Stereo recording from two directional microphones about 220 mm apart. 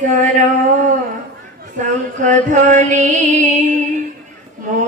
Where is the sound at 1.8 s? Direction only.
35° right (ahead or behind).